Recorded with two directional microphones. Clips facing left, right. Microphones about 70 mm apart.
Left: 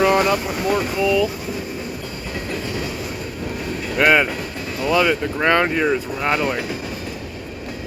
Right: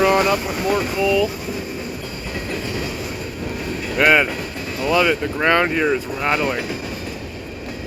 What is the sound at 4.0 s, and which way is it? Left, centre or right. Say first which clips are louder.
Speech: even; centre.